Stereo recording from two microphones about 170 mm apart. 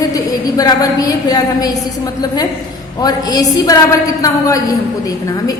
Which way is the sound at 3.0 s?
20° left (ahead or behind).